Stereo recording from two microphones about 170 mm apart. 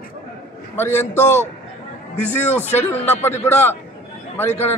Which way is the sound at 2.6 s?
15° left (ahead or behind).